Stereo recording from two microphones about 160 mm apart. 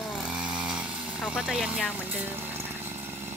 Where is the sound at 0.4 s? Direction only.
5° right (ahead or behind).